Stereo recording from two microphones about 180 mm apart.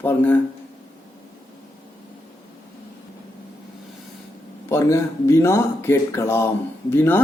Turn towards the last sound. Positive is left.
turn(degrees=10)  # may be behind; listen again after turning